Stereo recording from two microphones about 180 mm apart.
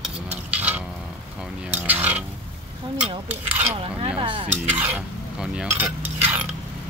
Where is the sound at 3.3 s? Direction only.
10° right (ahead or behind).